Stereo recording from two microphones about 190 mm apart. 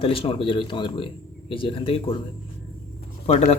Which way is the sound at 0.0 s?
30° left (ahead or behind).